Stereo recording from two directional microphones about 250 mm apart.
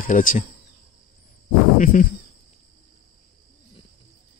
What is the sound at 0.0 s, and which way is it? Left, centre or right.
Speech, left.